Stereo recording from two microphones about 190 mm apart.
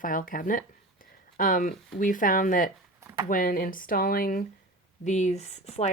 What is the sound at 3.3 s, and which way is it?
A woman's voice, 50° left (ahead or behind).